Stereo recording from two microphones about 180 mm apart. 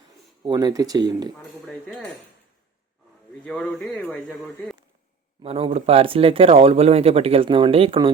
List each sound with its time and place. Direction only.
0.4 s speech: 20° right (ahead or behind)
1.6 s a man's voice: 5° left (ahead or behind)
3.4 s a man's voice: 5° left (ahead or behind)
5.4 s speech: 30° right (ahead or behind)